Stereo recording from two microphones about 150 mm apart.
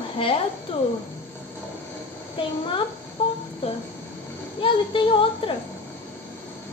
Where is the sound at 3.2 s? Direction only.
35° left (ahead or behind).